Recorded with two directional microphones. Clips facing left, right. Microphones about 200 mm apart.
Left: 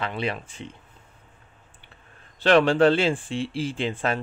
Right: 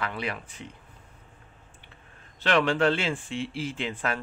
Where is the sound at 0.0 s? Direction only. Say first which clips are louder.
Left 4 dB; 25° left (ahead or behind).